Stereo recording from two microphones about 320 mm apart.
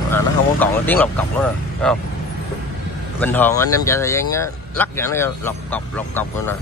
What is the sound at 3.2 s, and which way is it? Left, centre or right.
Speech, centre.